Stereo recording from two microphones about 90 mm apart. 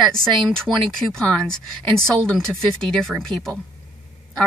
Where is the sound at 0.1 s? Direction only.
5° left (ahead or behind).